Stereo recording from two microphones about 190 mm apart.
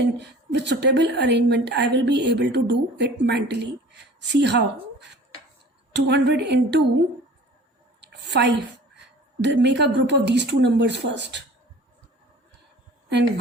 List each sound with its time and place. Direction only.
0.2 s a woman's voice: 65° right (ahead or behind)
5.9 s a woman's voice: 65° right (ahead or behind)
8.0 s a sound: 65° right (ahead or behind)
9.0 s a woman's voice: 65° right (ahead or behind)